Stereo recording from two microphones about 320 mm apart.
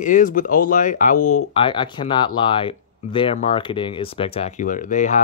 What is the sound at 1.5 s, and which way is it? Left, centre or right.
Speech, centre.